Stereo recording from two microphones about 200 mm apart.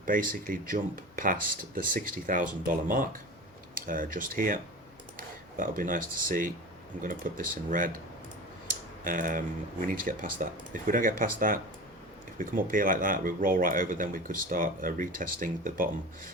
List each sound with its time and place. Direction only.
0.0 s speech: 45° right (ahead or behind)
9.0 s speech: 45° right (ahead or behind)